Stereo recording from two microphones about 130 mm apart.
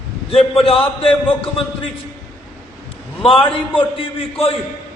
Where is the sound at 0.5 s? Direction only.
45° left (ahead or behind).